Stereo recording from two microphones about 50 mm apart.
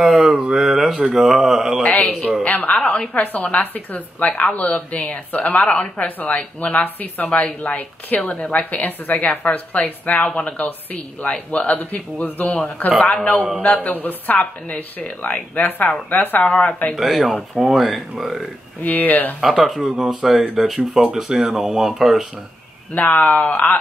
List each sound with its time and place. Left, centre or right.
0.0 s a sound: centre
1.1 s speech: centre
1.8 s speech: left
16.9 s speech: centre
18.8 s speech: left
19.8 s speech: centre
22.9 s speech: left